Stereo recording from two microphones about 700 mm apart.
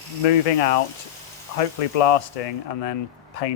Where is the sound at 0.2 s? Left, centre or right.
Left.